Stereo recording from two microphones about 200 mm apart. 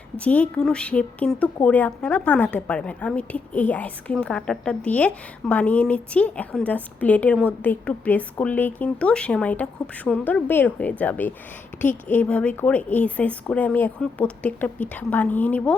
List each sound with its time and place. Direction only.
0.3 s a woman's voice: 5° left (ahead or behind)